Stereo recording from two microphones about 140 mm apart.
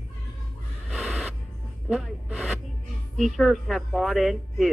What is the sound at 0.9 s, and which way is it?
Printer, centre (ahead or behind).